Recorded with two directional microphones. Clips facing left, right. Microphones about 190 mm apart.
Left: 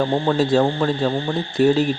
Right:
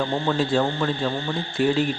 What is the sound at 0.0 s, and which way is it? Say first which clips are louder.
Speech: left 4 dB; 35° left (ahead or behind).